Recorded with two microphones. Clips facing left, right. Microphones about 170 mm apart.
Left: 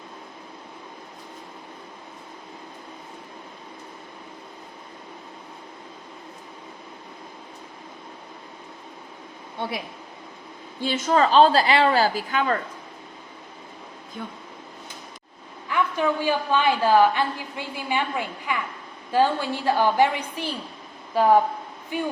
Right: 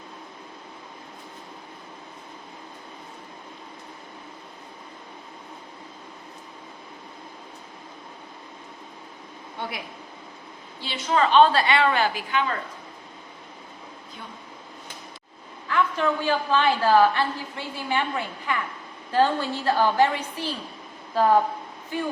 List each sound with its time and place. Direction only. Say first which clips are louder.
9.6 s speech: left 4 dB; 25° left (ahead or behind)
10.8 s a woman's voice: left 3 dB; 45° left (ahead or behind)
15.7 s a woman's voice: even; 15° left (ahead or behind)